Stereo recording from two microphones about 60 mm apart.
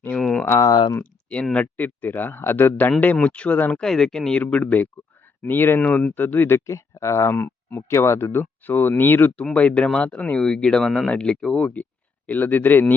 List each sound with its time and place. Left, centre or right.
0.2 s a sound: centre
0.6 s speech: left
1.5 s speech: left
3.2 s speech: centre
3.8 s speech: centre
5.4 s speech: left
5.8 s speech: left
6.7 s speech: left
7.3 s speech: left
8.3 s speech: left
9.3 s speech: left